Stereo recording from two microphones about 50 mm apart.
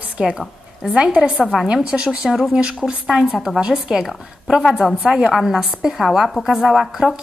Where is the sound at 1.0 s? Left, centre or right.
Centre.